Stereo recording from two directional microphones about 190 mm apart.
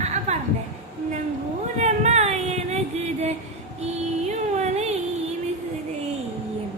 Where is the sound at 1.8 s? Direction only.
35° right (ahead or behind).